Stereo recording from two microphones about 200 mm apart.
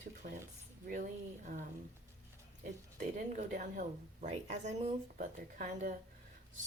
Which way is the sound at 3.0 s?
40° right (ahead or behind).